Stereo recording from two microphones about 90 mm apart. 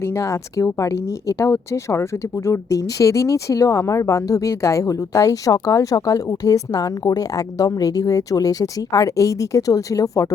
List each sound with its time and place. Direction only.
0.0 s speech: 30° left (ahead or behind)